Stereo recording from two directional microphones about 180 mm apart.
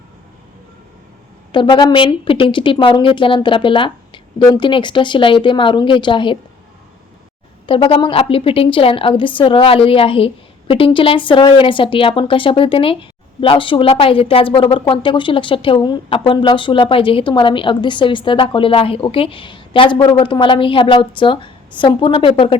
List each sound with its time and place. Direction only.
1.5 s a woman's voice: 25° left (ahead or behind)
7.7 s a woman's voice: 30° left (ahead or behind)